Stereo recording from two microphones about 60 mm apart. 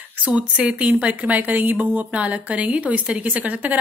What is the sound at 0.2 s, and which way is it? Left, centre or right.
A woman's voice, right.